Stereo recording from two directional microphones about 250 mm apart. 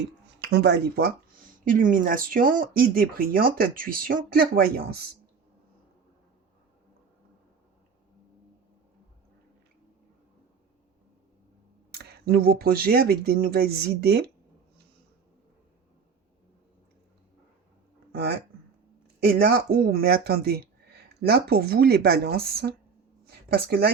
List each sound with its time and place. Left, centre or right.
0.4 s speech: right
11.9 s speech: right
18.1 s speech: right
23.2 s a sound: right